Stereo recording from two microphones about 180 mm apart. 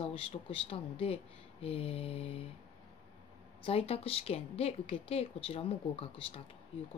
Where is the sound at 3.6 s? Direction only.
30° left (ahead or behind).